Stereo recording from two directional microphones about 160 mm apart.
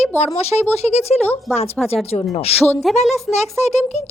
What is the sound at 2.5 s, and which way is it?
A woman's voice, 40° left (ahead or behind).